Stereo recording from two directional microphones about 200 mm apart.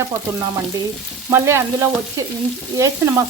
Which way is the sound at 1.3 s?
15° right (ahead or behind).